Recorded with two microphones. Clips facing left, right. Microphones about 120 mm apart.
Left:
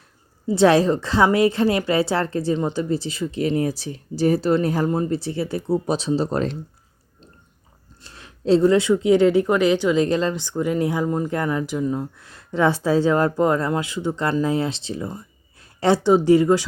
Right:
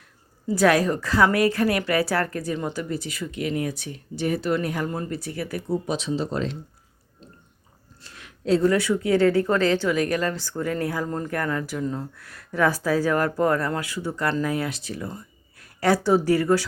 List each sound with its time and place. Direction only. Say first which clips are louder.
0.4 s speech: left 4 dB; 25° left (ahead or behind); by 6.6 s 40° left (ahead or behind)
8.0 s speech: left 5 dB; 30° left (ahead or behind)